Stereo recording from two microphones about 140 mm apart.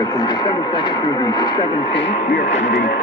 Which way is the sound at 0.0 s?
30° left (ahead or behind).